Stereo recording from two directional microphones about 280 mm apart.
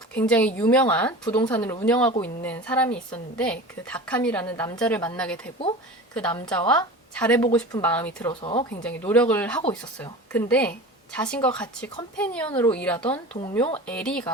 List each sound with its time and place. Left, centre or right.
0.1 s a woman's voice: centre
8.3 s speech: centre
8.8 s a woman's voice: centre